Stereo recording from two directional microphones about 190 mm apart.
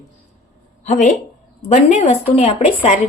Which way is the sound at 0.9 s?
40° left (ahead or behind).